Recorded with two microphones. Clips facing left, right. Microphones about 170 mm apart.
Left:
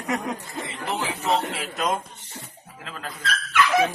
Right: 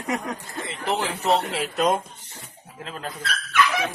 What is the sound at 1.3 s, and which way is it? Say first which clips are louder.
Speech: right 3 dB; 35° right (ahead or behind).